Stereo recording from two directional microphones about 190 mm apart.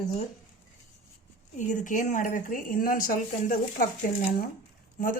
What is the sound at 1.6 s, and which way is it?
Speech, 40° left (ahead or behind).